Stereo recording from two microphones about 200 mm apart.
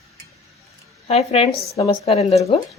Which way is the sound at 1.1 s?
30° left (ahead or behind).